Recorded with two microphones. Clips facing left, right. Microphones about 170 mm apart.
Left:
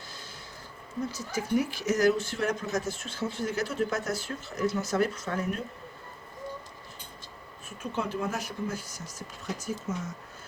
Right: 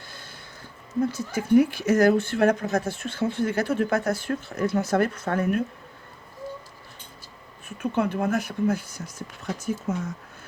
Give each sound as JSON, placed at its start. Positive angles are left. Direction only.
{"t": 0.1, "sound": "a sound", "side_deg": -55}
{"t": 1.0, "sound": "speech", "side_deg": -55}
{"t": 7.8, "sound": "speech", "side_deg": -55}